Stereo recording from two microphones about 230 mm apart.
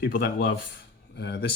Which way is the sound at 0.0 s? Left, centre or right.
Left.